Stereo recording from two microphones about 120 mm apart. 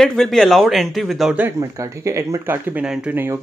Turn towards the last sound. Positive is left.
turn(degrees=-15)  # may be behind; listen again after turning